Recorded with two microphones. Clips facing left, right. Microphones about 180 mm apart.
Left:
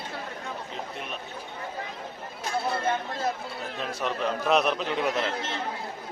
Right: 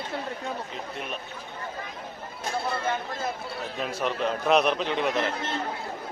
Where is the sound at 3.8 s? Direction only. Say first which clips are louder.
Right 1 dB; centre (ahead or behind).